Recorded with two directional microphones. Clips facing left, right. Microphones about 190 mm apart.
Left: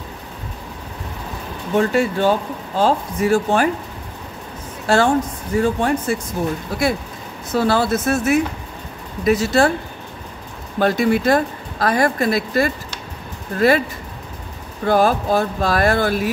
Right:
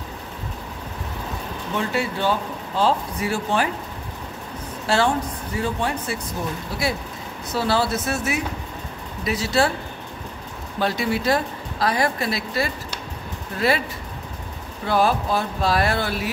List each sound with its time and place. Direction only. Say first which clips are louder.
1.8 s speech: left 8 dB; 45° left (ahead or behind)
4.8 s a woman's voice: left 5 dB; 50° left (ahead or behind)
10.8 s speech: left 6 dB; 50° left (ahead or behind)
14.9 s speech: left 4 dB; 45° left (ahead or behind)